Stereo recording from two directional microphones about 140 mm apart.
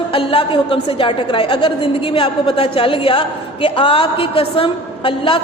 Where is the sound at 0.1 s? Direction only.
40° left (ahead or behind).